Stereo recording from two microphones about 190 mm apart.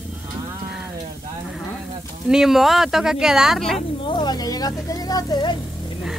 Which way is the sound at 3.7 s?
25° left (ahead or behind).